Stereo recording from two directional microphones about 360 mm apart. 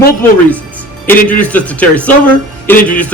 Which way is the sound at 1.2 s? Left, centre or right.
Centre.